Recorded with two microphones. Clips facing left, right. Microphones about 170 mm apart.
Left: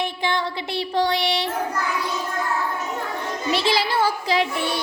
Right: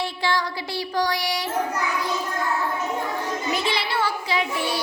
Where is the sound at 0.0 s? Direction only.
20° left (ahead or behind).